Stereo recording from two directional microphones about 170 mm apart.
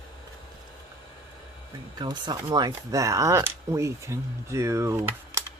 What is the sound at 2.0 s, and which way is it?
Speech, 25° right (ahead or behind).